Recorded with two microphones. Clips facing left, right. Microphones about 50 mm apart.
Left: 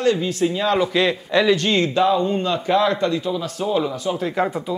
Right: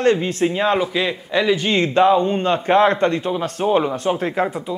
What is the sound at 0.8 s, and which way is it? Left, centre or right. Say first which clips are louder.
Speech: left 2 dB; centre.